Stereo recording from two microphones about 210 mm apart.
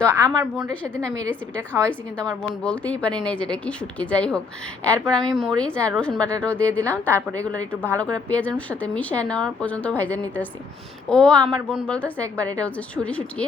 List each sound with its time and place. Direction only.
0.1 s a woman's voice: 5° right (ahead or behind)
1.0 s a woman's voice: 15° right (ahead or behind)
1.9 s a woman's voice: 5° left (ahead or behind)